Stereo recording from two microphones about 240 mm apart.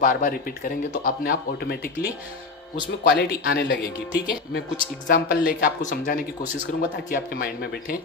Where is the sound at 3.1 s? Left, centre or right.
Left.